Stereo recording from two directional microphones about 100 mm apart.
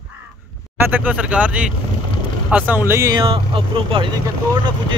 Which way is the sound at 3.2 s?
60° right (ahead or behind).